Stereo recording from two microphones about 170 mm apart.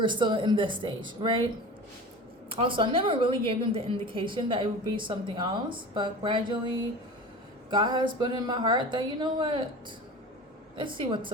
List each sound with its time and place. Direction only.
0.0 s a woman's voice: 30° right (ahead or behind)
2.5 s a woman's voice: 30° right (ahead or behind)
10.8 s a woman's voice: 30° right (ahead or behind)